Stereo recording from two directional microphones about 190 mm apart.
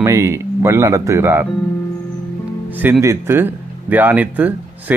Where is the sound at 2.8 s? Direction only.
15° right (ahead or behind).